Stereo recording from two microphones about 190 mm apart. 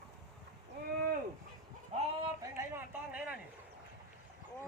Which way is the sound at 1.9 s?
30° right (ahead or behind).